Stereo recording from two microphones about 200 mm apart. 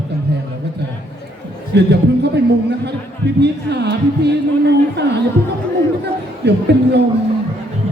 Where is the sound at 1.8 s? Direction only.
60° right (ahead or behind).